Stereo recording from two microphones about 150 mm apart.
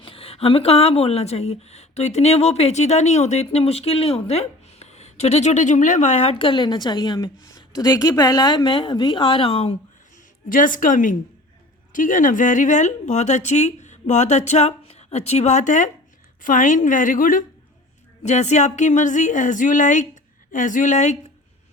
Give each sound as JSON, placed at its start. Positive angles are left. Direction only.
{"t": 0.0, "sound": "speech", "side_deg": 40}
{"t": 10.5, "sound": "speech", "side_deg": 60}
{"t": 18.2, "sound": "speech", "side_deg": 50}